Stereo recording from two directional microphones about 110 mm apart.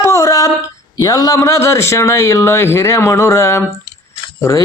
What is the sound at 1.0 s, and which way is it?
A man's voice, 35° left (ahead or behind).